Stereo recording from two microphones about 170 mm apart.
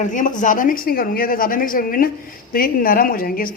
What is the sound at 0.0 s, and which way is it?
A woman's voice, 50° left (ahead or behind).